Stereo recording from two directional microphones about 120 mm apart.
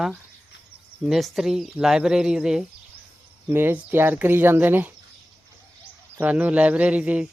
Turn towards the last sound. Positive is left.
turn(degrees=-10)  # may be behind; listen again after turning